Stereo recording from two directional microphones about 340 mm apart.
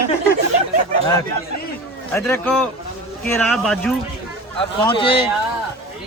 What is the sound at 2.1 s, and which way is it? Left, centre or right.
Speech, centre.